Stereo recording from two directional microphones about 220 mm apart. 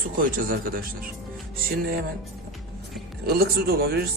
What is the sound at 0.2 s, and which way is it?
Speech, 40° right (ahead or behind).